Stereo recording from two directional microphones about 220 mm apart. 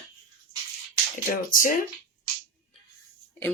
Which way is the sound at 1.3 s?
40° left (ahead or behind).